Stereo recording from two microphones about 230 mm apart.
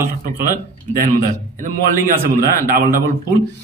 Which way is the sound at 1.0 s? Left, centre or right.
Right.